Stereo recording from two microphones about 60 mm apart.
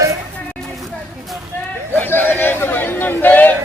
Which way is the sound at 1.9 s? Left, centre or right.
Left.